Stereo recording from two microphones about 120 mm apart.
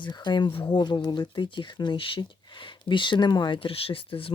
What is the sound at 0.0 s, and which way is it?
Speech, 40° left (ahead or behind).